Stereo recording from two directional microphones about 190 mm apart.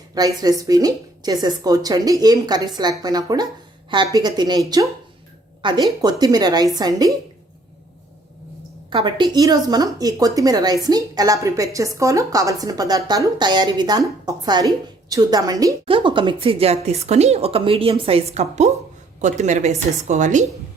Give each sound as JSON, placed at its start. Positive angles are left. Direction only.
{"t": 0.1, "sound": "speech", "side_deg": -20}
{"t": 8.9, "sound": "a woman's voice", "side_deg": -25}